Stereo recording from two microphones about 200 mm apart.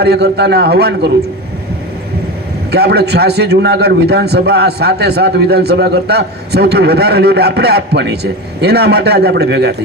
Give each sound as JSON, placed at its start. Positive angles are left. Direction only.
{"t": 0.0, "sound": "a man's voice", "side_deg": -55}
{"t": 2.7, "sound": "a man's voice", "side_deg": -55}